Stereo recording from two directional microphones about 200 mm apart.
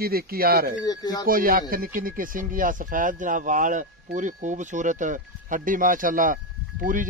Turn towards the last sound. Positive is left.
turn(degrees=-40)  # may be behind; listen again after turning